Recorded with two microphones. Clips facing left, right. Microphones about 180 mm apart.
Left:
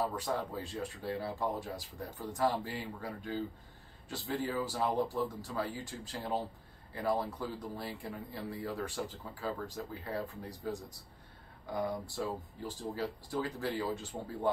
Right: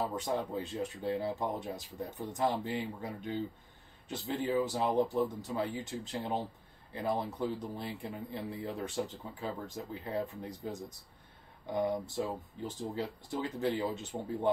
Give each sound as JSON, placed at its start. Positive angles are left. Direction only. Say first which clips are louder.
{"t": 0.0, "sound": "speech", "louder": "right 1 dB", "side_deg": -20}